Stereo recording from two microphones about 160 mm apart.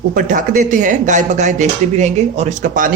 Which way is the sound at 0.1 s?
55° right (ahead or behind).